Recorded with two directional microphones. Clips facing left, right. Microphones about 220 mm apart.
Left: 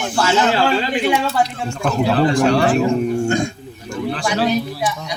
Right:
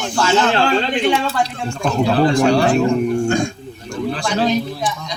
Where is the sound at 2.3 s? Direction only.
10° right (ahead or behind).